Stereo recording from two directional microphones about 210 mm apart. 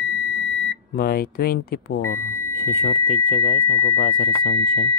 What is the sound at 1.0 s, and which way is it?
Speech, 45° left (ahead or behind).